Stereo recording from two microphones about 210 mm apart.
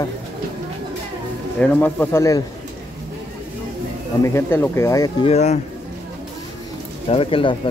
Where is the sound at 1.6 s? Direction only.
10° left (ahead or behind).